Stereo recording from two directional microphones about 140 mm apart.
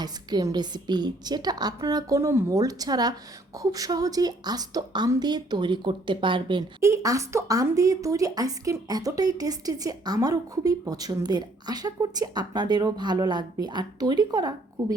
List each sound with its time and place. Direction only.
0.0 s speech: 30° right (ahead or behind)
6.8 s speech: 25° right (ahead or behind)